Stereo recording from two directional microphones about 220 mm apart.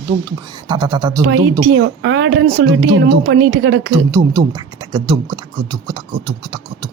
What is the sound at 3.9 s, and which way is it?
Speech, 15° right (ahead or behind).